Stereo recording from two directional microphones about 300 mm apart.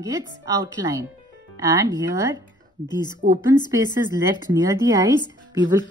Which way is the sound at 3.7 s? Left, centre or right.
Centre.